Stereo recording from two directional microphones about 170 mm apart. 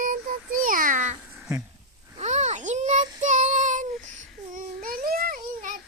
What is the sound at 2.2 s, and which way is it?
Child singing, 45° right (ahead or behind).